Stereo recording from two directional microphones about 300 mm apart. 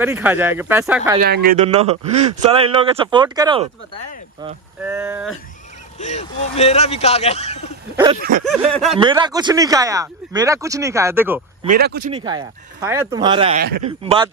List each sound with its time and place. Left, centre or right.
0.0 s speech: centre
1.2 s speech: right
1.7 s speech: right
4.8 s speech: centre
5.9 s speech: left
7.9 s speech: centre
11.6 s speech: right
12.1 s speech: centre